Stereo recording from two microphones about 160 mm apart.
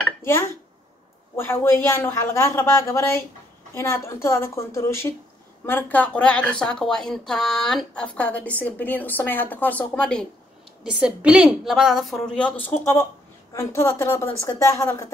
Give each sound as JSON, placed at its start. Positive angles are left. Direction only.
{"t": 0.2, "sound": "speech", "side_deg": 15}
{"t": 10.8, "sound": "a woman's voice", "side_deg": -5}